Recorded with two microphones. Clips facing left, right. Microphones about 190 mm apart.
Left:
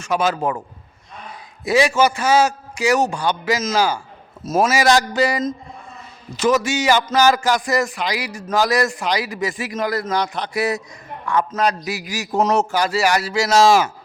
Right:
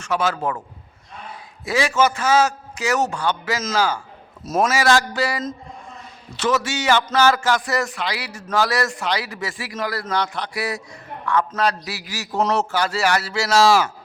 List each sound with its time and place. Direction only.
0.0 s a man's voice: 15° left (ahead or behind)
1.6 s a man's voice: 15° left (ahead or behind)
4.7 s a man's voice: 15° left (ahead or behind)